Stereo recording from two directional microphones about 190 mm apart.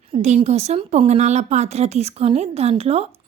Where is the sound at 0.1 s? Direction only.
35° right (ahead or behind).